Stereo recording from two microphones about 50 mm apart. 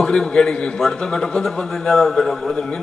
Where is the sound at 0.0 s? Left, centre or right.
Centre.